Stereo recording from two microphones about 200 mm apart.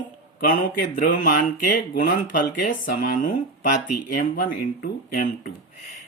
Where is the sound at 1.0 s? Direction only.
45° left (ahead or behind).